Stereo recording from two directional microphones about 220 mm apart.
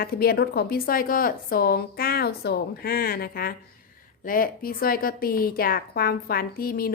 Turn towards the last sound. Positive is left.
turn(degrees=45)  # may be behind; listen again after turning